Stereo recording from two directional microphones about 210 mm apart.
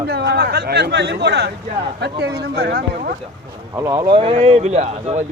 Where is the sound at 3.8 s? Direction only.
15° right (ahead or behind); by 5.2 s 30° right (ahead or behind).